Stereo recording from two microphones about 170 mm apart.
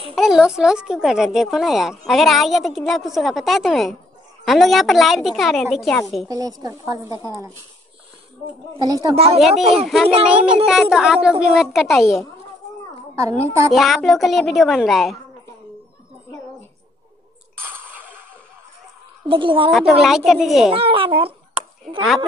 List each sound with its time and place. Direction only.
0.1 s a woman's voice: centre (ahead or behind)
6.2 s a woman's voice: 20° right (ahead or behind)
8.8 s a woman's voice: 20° right (ahead or behind)
9.1 s a child's voice: 35° right (ahead or behind)
10.2 s a woman's voice: 5° right (ahead or behind)
13.2 s a child's voice: 15° right (ahead or behind)
13.7 s a woman's voice: centre (ahead or behind)
17.6 s a sound: 10° right (ahead or behind)
19.2 s a child's voice: 30° right (ahead or behind)
19.7 s a woman's voice: centre (ahead or behind)
20.7 s a child's voice: 30° right (ahead or behind)